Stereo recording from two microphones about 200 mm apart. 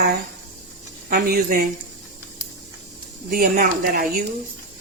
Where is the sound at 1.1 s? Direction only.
50° right (ahead or behind).